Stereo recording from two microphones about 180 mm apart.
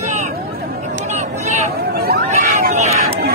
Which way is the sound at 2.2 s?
45° right (ahead or behind).